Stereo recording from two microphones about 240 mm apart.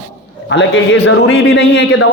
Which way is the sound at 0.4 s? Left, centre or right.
Left.